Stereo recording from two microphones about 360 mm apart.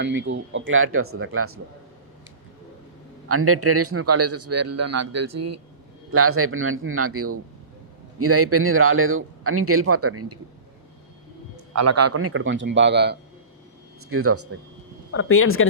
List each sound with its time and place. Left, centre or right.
0.0 s a man's voice: right
3.2 s a man's voice: right
11.5 s a man's voice: right
15.1 s speech: left